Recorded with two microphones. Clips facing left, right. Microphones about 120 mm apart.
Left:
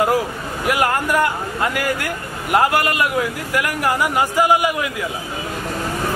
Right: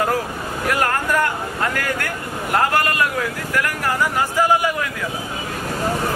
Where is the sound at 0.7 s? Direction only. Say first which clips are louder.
Left 2 dB; 10° left (ahead or behind).